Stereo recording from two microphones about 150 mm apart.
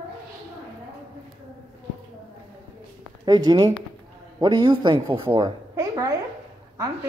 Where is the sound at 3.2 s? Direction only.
30° right (ahead or behind).